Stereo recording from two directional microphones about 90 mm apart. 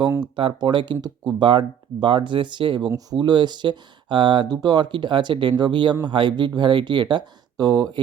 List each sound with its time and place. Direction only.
0.3 s speech: 60° right (ahead or behind)
2.9 s speech: 50° right (ahead or behind)